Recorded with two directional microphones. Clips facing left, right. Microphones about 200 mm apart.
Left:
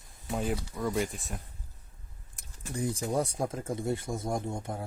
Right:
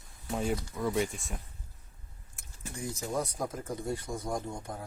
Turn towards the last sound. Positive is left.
turn(degrees=25)  # may be behind; listen again after turning